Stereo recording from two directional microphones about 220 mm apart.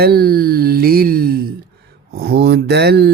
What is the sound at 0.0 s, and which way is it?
Speech, 45° right (ahead or behind).